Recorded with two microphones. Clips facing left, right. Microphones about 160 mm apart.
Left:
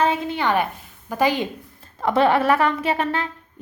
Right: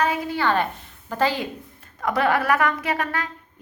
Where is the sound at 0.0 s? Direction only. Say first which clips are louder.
Left 2 dB; 25° left (ahead or behind).